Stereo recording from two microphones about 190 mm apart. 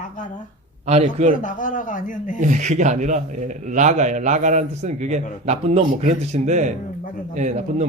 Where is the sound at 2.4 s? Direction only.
40° right (ahead or behind).